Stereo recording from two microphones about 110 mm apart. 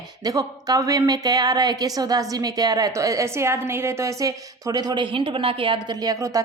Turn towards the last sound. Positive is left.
turn(degrees=-30)  # may be behind; listen again after turning